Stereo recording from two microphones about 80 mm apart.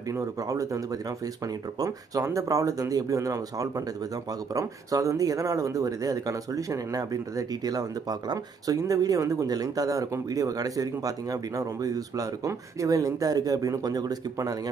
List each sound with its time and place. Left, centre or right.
0.1 s speech: right